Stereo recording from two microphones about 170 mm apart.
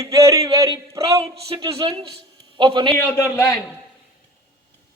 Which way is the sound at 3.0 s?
15° left (ahead or behind).